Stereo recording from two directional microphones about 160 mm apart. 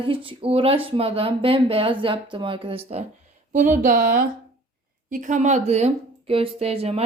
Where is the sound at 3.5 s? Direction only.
50° right (ahead or behind).